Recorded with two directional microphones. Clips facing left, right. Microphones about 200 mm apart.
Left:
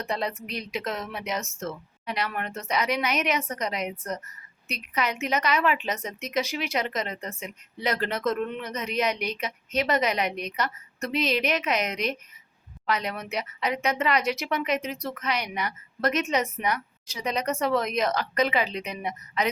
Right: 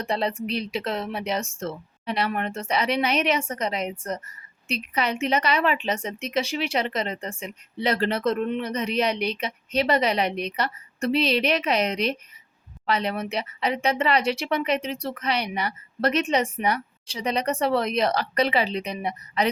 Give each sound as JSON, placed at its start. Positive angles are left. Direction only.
{"t": 0.0, "sound": "speech", "side_deg": -30}